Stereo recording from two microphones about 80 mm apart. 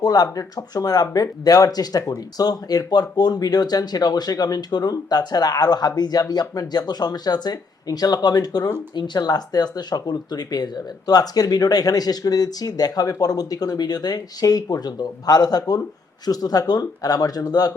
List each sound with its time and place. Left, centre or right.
0.0 s a man's voice: left